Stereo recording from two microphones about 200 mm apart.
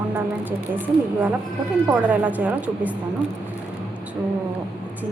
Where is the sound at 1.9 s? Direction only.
10° right (ahead or behind).